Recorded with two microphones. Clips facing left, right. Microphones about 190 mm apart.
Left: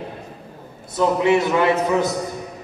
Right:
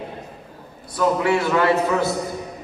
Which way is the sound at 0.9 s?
20° left (ahead or behind).